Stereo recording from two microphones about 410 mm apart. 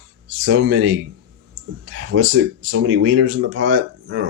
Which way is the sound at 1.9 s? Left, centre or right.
Right.